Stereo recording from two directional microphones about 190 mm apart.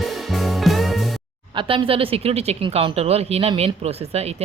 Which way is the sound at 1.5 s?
30° right (ahead or behind).